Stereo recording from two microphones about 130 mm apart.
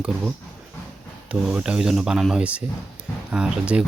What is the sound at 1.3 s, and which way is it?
Speech, 10° right (ahead or behind).